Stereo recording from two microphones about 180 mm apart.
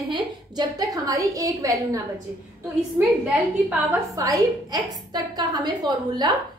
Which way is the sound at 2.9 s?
10° right (ahead or behind).